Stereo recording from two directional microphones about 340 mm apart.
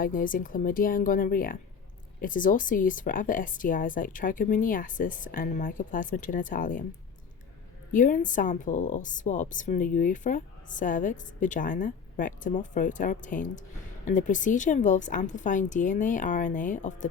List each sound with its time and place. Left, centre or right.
0.0 s a woman's voice: left
7.9 s a woman's voice: left